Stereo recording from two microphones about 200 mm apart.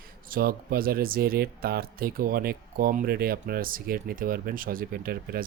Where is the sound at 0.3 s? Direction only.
45° right (ahead or behind).